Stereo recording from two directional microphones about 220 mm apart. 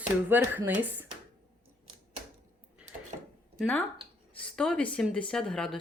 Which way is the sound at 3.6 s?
5° left (ahead or behind).